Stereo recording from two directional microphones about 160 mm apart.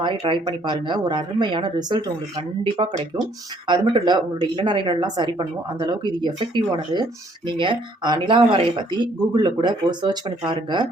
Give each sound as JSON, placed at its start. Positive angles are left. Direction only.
{"t": 0.0, "sound": "a woman's voice", "side_deg": -30}
{"t": 3.7, "sound": "a woman's voice", "side_deg": -30}